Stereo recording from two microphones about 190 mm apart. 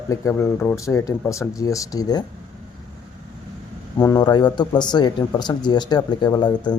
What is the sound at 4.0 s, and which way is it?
A man's voice, 20° left (ahead or behind).